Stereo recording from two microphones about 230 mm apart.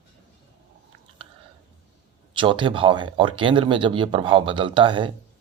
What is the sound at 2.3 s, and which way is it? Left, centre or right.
Speech, right.